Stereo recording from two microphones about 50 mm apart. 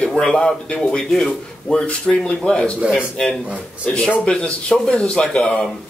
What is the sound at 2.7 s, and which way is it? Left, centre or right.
Speech, right.